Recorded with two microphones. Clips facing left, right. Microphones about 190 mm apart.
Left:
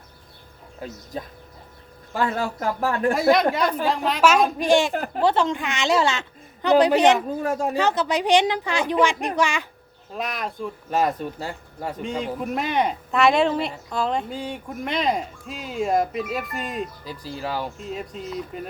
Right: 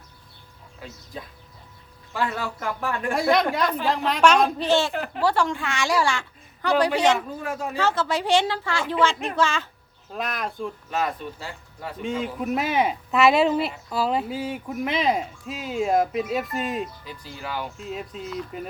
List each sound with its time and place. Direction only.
0.8 s speech: 45° left (ahead or behind)
2.1 s speech: 35° left (ahead or behind)
3.2 s speech: centre (ahead or behind)
4.9 s speech: 45° left (ahead or behind)
5.2 s a child's voice: 20° left (ahead or behind)
7.4 s speech: 40° left (ahead or behind)
7.8 s a woman's voice: 15° left (ahead or behind)
10.1 s speech: centre (ahead or behind)
10.9 s speech: 40° left (ahead or behind)
12.4 s speech: 5° right (ahead or behind)
17.1 s speech: 35° left (ahead or behind)
17.7 s speech: centre (ahead or behind)